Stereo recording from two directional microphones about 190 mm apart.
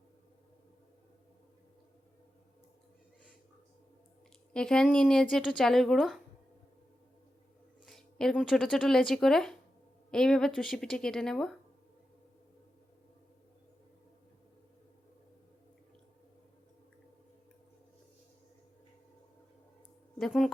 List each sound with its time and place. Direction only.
4.5 s speech: 5° left (ahead or behind)
7.9 s speech: centre (ahead or behind)
20.1 s speech: centre (ahead or behind)